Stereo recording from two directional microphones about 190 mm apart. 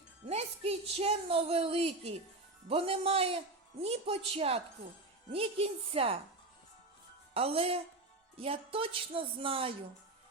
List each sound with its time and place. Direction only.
0.3 s speech: 35° right (ahead or behind)
7.3 s speech: 30° right (ahead or behind)